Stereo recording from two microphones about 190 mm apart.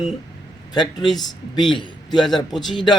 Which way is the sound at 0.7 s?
20° left (ahead or behind).